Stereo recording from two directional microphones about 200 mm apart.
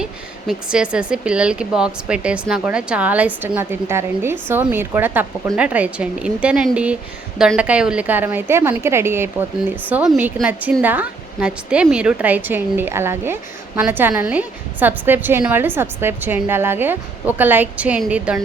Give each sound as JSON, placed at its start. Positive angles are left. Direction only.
{"t": 0.0, "sound": "a woman's voice", "side_deg": -5}